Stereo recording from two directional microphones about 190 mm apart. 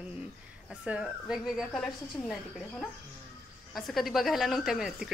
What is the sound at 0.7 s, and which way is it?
A woman's voice, 5° right (ahead or behind).